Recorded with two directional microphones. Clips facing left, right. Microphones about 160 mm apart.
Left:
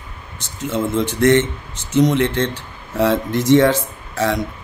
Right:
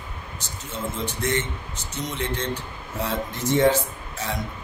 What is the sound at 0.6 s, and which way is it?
A man's voice, 80° left.